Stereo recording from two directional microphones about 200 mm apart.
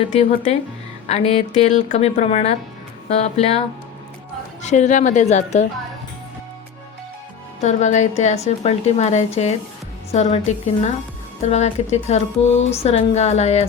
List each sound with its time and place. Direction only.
0.1 s speech: 35° left (ahead or behind)
4.6 s speech: 35° left (ahead or behind)
7.6 s speech: 35° left (ahead or behind)
11.4 s speech: 35° left (ahead or behind)